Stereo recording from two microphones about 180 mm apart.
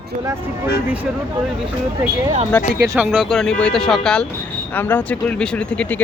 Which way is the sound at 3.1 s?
Centre (ahead or behind).